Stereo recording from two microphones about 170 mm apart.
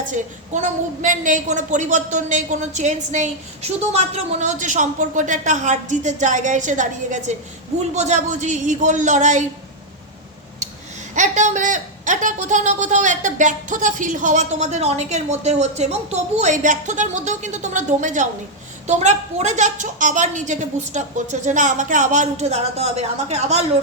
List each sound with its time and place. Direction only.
0.1 s a woman's voice: 45° right (ahead or behind)
11.1 s a woman's voice: 45° right (ahead or behind)